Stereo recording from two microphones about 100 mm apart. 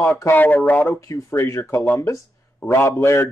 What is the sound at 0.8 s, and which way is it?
Speech, 30° left (ahead or behind).